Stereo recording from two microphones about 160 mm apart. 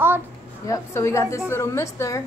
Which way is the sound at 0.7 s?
20° left (ahead or behind).